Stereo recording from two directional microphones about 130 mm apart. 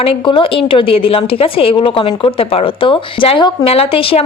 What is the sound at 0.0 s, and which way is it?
A woman's voice, 45° left (ahead or behind).